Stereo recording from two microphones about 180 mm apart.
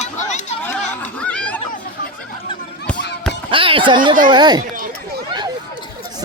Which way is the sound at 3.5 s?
30° right (ahead or behind).